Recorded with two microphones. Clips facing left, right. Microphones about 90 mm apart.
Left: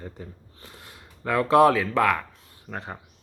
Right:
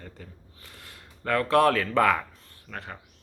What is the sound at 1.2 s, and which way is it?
Speech, 15° left (ahead or behind).